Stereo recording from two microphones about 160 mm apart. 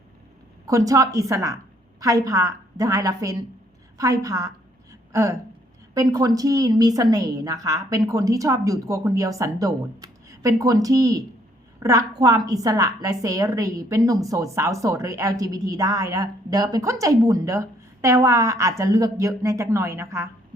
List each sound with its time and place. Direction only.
0.6 s a woman's voice: 20° right (ahead or behind)
3.9 s a sound: 20° right (ahead or behind)
5.9 s a woman's voice: 20° right (ahead or behind)